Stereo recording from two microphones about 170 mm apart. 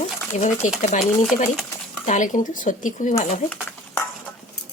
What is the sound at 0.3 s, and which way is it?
Speech, 45° left (ahead or behind).